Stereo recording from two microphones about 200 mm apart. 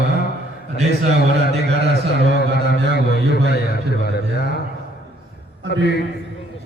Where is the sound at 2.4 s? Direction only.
55° left (ahead or behind).